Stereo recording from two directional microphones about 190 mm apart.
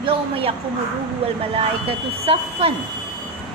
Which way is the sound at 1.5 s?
30° right (ahead or behind).